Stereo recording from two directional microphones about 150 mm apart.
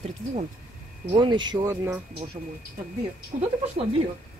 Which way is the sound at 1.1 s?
30° right (ahead or behind).